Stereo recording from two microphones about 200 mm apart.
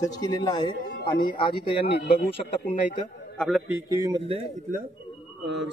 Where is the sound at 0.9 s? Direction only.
50° left (ahead or behind).